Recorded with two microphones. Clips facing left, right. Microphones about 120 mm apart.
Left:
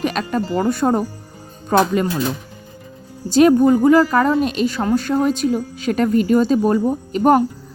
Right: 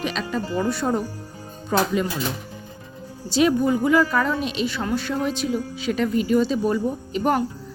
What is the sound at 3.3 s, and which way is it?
Speech, 50° left (ahead or behind).